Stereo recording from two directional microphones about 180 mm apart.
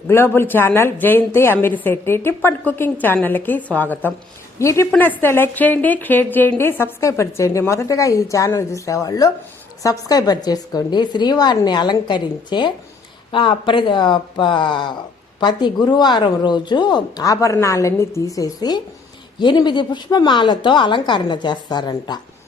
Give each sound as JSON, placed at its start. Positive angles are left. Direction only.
{"t": 0.1, "sound": "a woman's voice", "side_deg": 15}